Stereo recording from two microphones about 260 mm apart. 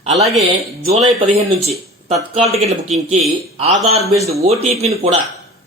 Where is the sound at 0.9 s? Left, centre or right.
Right.